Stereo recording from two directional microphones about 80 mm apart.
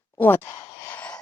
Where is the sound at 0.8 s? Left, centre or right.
Centre.